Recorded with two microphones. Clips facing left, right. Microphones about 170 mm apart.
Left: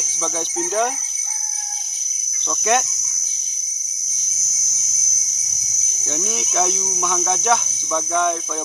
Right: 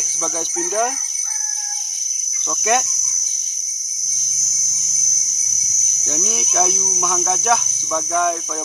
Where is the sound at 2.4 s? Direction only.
Centre (ahead or behind).